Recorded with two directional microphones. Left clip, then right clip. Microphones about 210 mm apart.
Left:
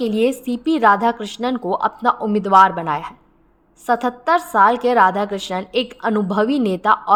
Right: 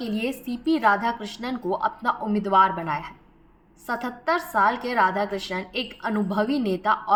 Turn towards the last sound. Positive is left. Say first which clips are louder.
# left 7 dB
turn(degrees=45)  # may be behind; listen again after turning